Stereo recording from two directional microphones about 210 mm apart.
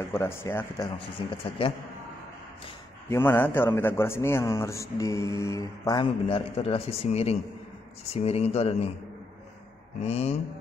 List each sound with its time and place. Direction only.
0.1 s a man's voice: 10° left (ahead or behind)
0.9 s speech: 25° left (ahead or behind)
3.1 s a man's voice: 10° left (ahead or behind); by 8.9 s 30° left (ahead or behind)
10.0 s speech: 30° left (ahead or behind)